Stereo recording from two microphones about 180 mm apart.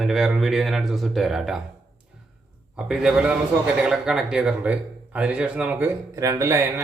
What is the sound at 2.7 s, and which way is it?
Speech, 5° right (ahead or behind).